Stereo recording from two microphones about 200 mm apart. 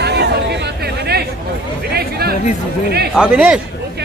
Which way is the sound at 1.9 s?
50° right (ahead or behind).